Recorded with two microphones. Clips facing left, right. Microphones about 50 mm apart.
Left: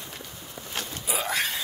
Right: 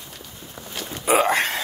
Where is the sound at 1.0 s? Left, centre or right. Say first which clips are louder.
Right 10 dB; right.